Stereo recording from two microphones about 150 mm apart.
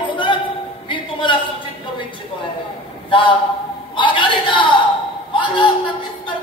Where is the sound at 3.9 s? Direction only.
35° left (ahead or behind).